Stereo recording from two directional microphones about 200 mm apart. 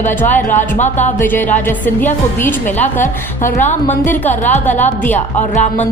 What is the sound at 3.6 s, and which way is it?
Music, 35° left (ahead or behind).